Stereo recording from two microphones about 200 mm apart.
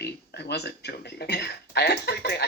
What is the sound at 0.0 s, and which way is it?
Speech, 55° left (ahead or behind).